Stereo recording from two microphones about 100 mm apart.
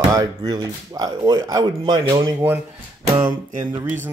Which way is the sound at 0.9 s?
40° right (ahead or behind).